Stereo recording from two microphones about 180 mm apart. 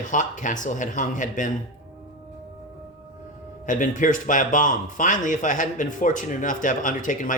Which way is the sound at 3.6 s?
45° left (ahead or behind).